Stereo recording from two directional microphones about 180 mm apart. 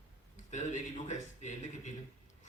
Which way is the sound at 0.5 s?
40° left (ahead or behind).